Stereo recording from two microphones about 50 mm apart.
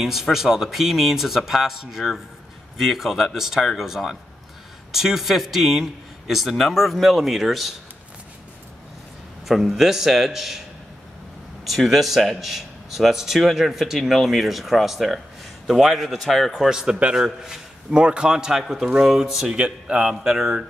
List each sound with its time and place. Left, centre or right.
0.0 s a man's voice: centre
3.7 s a sound: centre
4.9 s a man's voice: centre
9.5 s a man's voice: centre
11.6 s a man's voice: centre
16.6 s a sound: centre